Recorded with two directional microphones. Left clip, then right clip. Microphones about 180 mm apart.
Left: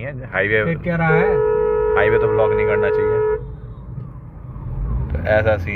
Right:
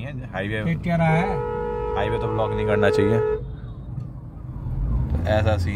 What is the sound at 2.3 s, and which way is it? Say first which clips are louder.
Speech: left 8 dB; 25° right (ahead or behind).